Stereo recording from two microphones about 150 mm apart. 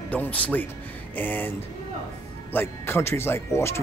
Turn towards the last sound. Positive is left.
turn(degrees=15)  # may be behind; listen again after turning